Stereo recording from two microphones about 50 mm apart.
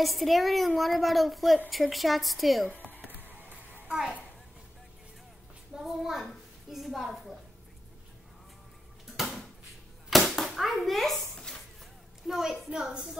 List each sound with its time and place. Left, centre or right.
0.0 s a woman's voice: centre
3.1 s music: right
5.8 s a child's voice: centre
9.0 s a sound: centre
10.5 s hands: centre
12.3 s a woman's voice: centre